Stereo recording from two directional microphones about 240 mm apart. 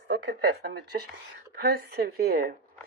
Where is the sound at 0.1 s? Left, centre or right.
Right.